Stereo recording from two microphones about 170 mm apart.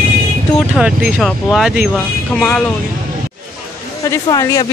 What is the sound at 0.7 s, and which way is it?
Speech, 5° right (ahead or behind).